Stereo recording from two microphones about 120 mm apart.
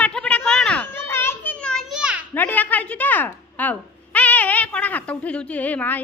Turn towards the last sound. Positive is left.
turn(degrees=15)  # may be behind; listen again after turning